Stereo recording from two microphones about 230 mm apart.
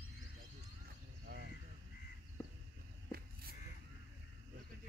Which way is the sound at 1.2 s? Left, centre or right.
Right.